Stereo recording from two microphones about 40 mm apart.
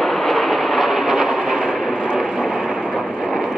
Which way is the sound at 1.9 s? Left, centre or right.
Right.